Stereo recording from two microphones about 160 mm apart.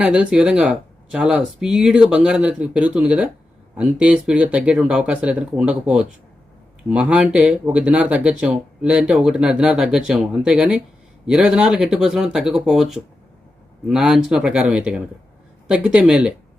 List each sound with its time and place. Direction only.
0.0 s speech: 5° right (ahead or behind)